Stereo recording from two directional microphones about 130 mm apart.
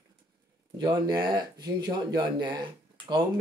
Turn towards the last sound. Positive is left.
turn(degrees=-35)  # may be behind; listen again after turning